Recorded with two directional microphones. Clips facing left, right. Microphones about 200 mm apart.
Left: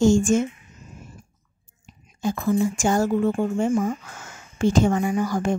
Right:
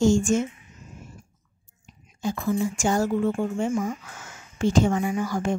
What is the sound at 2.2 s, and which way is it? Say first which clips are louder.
A woman's voice: left 3 dB; 45° left (ahead or behind).